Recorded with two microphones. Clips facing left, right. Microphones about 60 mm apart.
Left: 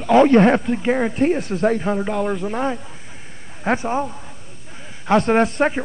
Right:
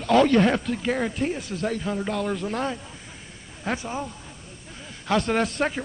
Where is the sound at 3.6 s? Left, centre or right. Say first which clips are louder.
Left 8 dB; left.